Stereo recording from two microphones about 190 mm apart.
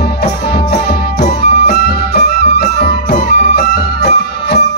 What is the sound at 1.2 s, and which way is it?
Music, 60° left (ahead or behind).